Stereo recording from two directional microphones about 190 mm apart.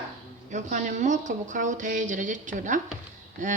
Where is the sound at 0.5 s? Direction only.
40° right (ahead or behind).